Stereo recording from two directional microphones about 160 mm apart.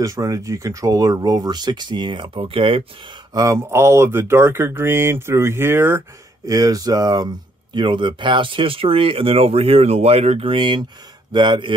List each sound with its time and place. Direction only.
0.0 s speech: 20° right (ahead or behind); by 2.8 s 35° right (ahead or behind)
3.3 s speech: 15° right (ahead or behind)